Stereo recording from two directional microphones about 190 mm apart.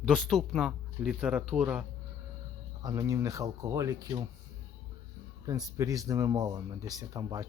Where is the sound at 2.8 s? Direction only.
20° right (ahead or behind).